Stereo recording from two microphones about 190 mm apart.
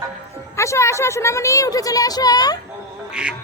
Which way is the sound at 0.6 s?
15° left (ahead or behind).